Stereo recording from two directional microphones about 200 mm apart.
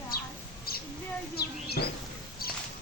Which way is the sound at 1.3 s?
50° left (ahead or behind).